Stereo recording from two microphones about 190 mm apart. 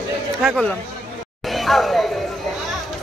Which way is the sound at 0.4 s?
Centre (ahead or behind).